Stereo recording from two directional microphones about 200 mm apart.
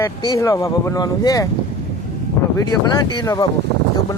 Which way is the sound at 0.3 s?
15° left (ahead or behind).